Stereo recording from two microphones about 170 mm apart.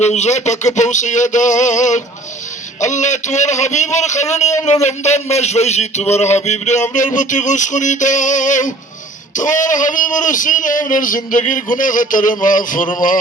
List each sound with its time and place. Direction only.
0.0 s speech: 40° left (ahead or behind)
4.6 s a sound: 40° left (ahead or behind)
6.9 s speech: 50° left (ahead or behind)